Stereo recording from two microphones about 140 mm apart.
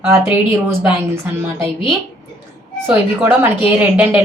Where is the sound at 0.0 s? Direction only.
15° right (ahead or behind).